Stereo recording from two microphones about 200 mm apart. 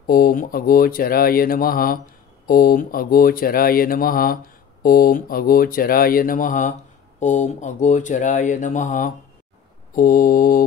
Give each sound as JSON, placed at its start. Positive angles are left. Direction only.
{"t": 0.0, "sound": "speech", "side_deg": 45}